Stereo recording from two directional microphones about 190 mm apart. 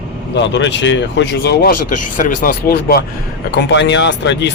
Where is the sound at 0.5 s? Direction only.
70° left (ahead or behind).